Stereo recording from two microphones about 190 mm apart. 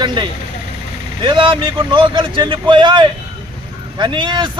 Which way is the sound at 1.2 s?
25° right (ahead or behind).